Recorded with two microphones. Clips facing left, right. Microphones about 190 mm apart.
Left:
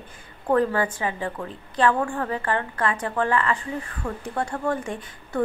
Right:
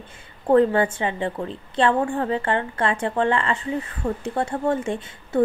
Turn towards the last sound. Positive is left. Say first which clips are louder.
# right 4 dB
turn(degrees=-25)  # may be behind; listen again after turning